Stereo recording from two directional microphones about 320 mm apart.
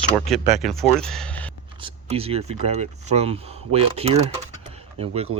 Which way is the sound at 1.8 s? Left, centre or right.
Centre.